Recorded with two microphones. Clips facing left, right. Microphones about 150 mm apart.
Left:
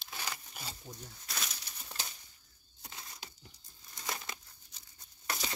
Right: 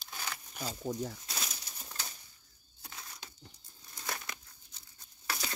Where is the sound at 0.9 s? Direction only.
90° right.